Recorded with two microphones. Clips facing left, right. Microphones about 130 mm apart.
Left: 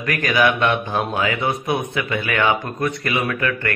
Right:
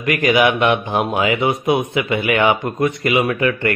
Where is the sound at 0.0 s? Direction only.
20° right (ahead or behind).